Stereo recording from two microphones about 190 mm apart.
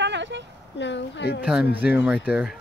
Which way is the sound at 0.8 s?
70° left (ahead or behind).